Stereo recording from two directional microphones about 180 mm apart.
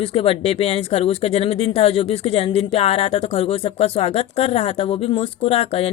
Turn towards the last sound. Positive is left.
turn(degrees=35)  # may be behind; listen again after turning